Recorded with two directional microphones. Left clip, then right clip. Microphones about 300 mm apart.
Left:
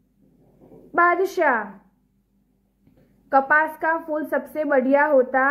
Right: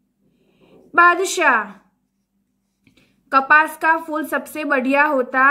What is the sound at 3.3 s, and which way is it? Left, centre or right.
A woman's voice, right.